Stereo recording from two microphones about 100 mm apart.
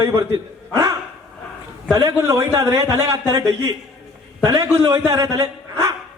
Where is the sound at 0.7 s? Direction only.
35° right (ahead or behind).